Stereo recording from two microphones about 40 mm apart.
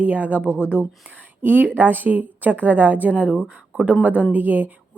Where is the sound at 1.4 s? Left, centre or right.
Right.